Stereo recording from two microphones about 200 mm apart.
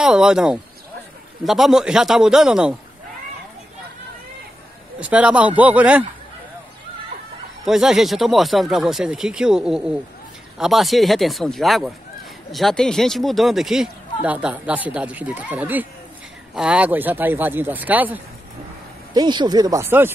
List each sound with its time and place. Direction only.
0.0 s speech: 5° right (ahead or behind)
5.0 s speech: 5° right (ahead or behind)
7.6 s speech: centre (ahead or behind)
19.1 s speech: 20° right (ahead or behind)